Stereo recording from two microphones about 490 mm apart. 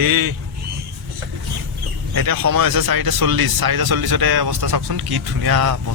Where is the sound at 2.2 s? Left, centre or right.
Right.